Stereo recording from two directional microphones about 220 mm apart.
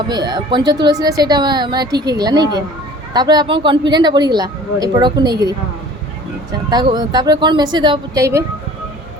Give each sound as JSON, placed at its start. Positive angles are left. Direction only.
{"t": 0.1, "sound": "speech", "side_deg": -20}
{"t": 6.7, "sound": "speech", "side_deg": -20}